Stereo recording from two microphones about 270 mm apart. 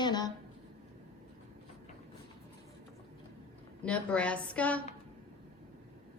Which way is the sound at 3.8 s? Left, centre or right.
Centre.